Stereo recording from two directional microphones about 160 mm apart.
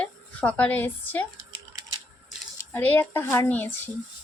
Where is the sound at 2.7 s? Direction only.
10° left (ahead or behind).